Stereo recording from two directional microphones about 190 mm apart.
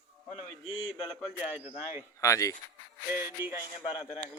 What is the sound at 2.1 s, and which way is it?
Speech, 15° left (ahead or behind).